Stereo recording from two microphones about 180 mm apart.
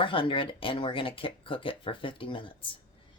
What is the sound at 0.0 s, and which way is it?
Speech, 30° left (ahead or behind).